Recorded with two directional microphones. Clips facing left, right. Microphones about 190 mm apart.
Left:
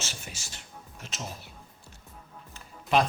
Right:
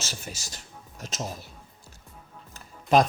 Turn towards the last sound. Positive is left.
turn(degrees=-40)  # may be behind; listen again after turning